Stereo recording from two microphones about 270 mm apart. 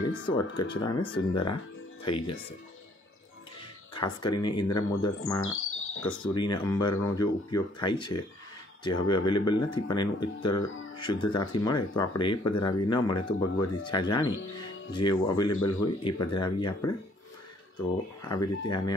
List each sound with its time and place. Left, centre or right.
0.3 s speech: centre
3.9 s speech: centre
5.4 s music: left
6.2 s speech: centre